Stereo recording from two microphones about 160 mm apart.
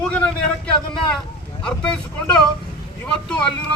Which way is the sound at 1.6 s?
5° left (ahead or behind).